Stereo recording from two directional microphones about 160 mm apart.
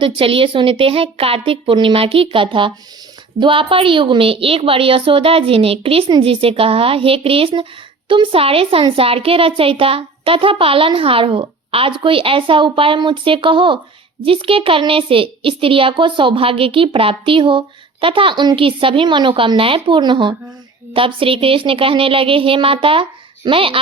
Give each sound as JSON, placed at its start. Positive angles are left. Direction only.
{"t": 0.0, "sound": "a woman's voice", "side_deg": -35}